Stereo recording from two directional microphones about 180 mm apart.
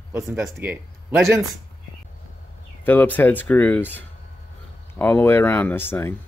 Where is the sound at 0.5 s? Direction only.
10° right (ahead or behind).